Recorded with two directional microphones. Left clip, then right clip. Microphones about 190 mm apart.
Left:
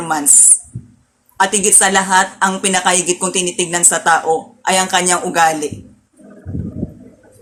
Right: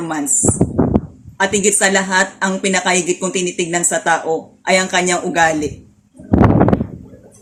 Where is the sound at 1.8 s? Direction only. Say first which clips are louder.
Left 3 dB; 15° right (ahead or behind).